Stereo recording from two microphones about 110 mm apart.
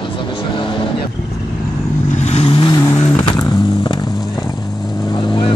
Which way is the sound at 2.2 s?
90° left.